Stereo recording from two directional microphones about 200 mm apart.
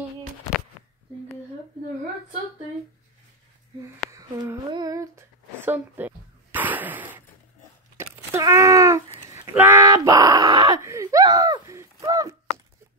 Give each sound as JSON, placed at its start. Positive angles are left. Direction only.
{"t": 4.1, "sound": "humming", "side_deg": -20}
{"t": 5.7, "sound": "a sound", "side_deg": -10}
{"t": 9.3, "sound": "wail", "side_deg": -10}